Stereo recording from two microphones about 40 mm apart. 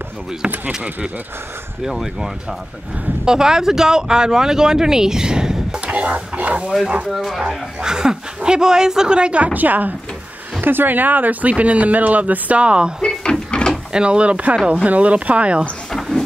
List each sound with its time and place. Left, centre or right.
1.8 s speech: centre
5.9 s speech: right
7.4 s speech: centre; by 9.9 s right
10.6 s speech: right
13.2 s a sound: left
13.9 s speech: right
15.9 s a sound: centre